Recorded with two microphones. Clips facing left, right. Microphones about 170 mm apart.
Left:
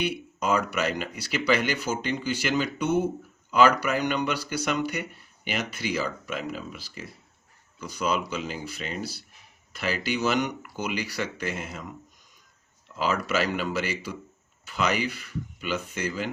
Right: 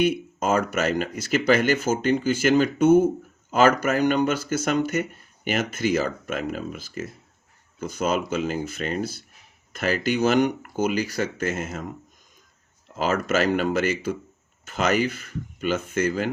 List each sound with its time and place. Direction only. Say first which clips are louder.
0.0 s speech: right 6 dB; 45° right (ahead or behind)